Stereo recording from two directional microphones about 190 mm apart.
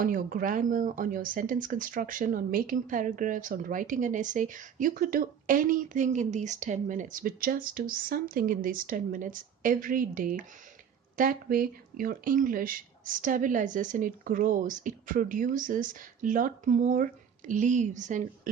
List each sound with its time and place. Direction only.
0.0 s speech: 45° right (ahead or behind)